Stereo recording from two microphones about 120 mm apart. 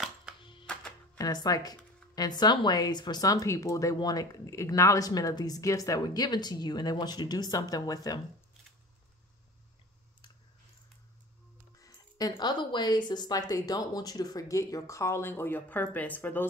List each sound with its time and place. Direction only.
1.1 s speech: 35° left (ahead or behind)
11.8 s speech: 35° left (ahead or behind); by 16.4 s 15° left (ahead or behind)